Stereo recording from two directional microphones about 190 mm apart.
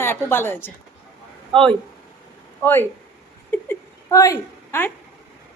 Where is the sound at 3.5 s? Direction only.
15° left (ahead or behind).